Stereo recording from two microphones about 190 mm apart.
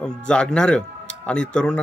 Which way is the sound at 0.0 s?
5° left (ahead or behind).